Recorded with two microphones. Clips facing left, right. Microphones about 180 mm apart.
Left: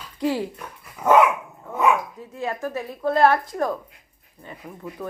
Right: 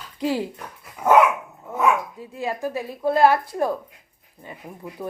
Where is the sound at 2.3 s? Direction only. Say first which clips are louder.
Right 1 dB; 10° right (ahead or behind).